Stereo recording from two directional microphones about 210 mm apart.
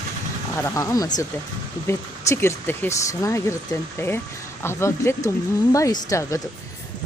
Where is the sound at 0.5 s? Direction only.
15° left (ahead or behind).